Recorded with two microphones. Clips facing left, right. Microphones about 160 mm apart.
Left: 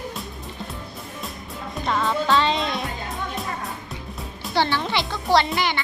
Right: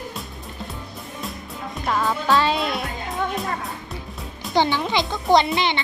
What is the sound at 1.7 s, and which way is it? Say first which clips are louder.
Music: even; 5° right (ahead or behind).